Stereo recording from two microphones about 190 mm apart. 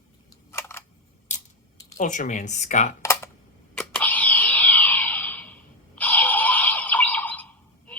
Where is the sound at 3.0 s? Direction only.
15° left (ahead or behind).